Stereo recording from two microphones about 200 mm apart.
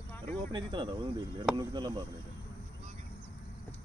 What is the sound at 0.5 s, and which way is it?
Speech, 20° right (ahead or behind).